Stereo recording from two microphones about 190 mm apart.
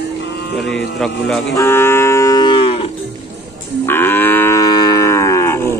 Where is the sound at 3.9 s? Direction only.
10° left (ahead or behind).